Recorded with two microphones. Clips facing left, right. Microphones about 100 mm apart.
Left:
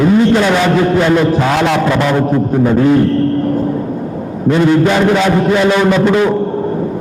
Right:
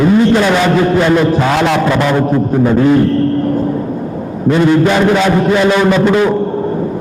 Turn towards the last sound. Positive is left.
turn(degrees=-25)  # may be behind; listen again after turning